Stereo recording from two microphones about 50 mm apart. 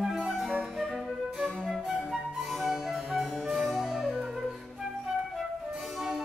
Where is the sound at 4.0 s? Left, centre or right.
Centre.